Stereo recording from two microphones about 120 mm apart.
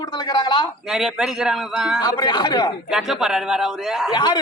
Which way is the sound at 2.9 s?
5° right (ahead or behind).